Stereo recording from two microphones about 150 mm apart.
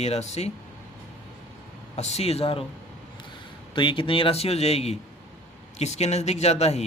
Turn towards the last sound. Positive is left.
turn(degrees=45)  # may be behind; listen again after turning